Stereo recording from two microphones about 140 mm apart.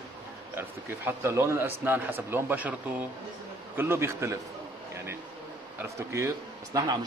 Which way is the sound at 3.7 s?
15° right (ahead or behind).